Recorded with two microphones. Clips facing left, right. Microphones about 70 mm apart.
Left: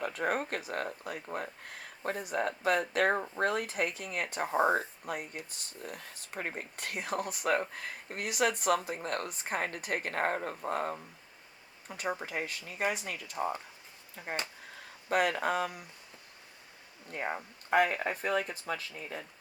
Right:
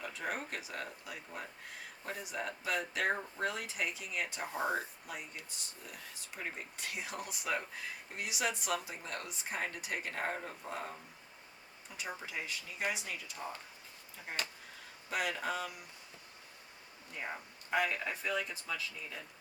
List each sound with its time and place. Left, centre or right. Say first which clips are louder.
0.0 s speech: left 8 dB; left
4.4 s speech: left 9 dB; left
5.0 s speech: left 7 dB; left
17.1 s speech: left 7 dB; left